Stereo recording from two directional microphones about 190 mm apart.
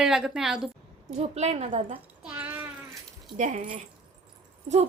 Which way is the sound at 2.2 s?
10° right (ahead or behind).